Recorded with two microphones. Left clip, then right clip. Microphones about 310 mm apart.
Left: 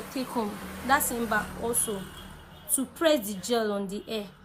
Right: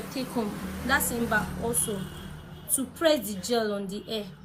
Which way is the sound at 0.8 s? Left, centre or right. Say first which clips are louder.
Left 1 dB; left.